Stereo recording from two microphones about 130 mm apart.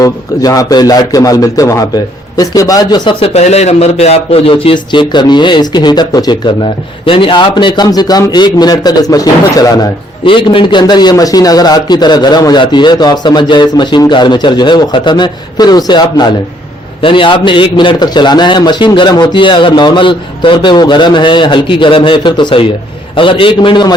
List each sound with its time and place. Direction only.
0.0 s a man's voice: 25° left (ahead or behind); by 3.4 s 45° left (ahead or behind)
3.4 s a man's voice: 55° left (ahead or behind); by 9.9 s 30° left (ahead or behind)
10.2 s a man's voice: 40° left (ahead or behind)